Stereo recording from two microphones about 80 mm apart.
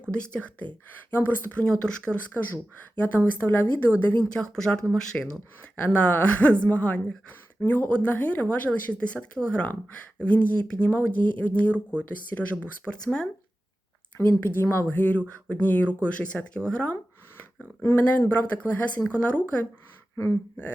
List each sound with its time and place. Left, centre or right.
0.1 s a woman's voice: centre
2.3 s a woman's voice: left
4.5 s speech: centre
5.7 s a woman's voice: left
12.8 s speech: centre
14.2 s a woman's voice: left